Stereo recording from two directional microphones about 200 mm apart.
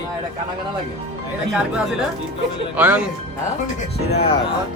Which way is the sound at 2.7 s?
5° right (ahead or behind).